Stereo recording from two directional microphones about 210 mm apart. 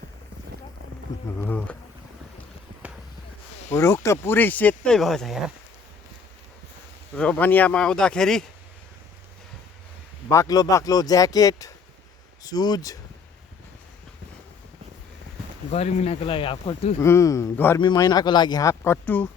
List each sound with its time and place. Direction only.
1.4 s speech: 5° left (ahead or behind)
3.7 s speech: 10° left (ahead or behind)
7.2 s speech: 5° left (ahead or behind)
10.2 s speech: 15° left (ahead or behind)
15.7 s speech: 30° left (ahead or behind)
17.0 s speech: 15° left (ahead or behind)